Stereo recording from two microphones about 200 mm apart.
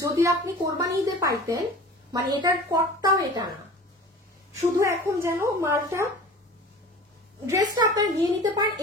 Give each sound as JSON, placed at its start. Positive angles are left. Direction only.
{"t": 0.0, "sound": "a woman's voice", "side_deg": -15}
{"t": 4.6, "sound": "a woman's voice", "side_deg": -15}
{"t": 7.4, "sound": "a woman's voice", "side_deg": -15}